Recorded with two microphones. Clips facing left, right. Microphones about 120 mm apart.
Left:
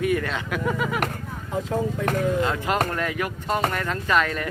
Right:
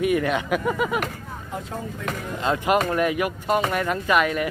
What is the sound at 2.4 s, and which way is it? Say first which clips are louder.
Speech: right 2 dB; 20° right (ahead or behind).